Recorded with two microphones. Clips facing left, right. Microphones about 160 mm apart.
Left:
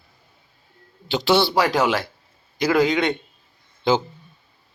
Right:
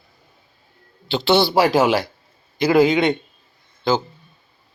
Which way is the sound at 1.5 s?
25° right (ahead or behind).